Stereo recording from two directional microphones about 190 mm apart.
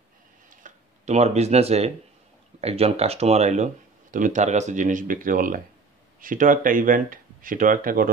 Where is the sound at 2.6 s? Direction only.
35° right (ahead or behind).